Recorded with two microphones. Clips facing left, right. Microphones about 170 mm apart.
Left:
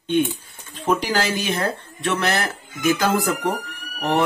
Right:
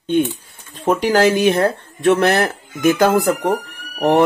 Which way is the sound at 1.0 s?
55° right (ahead or behind).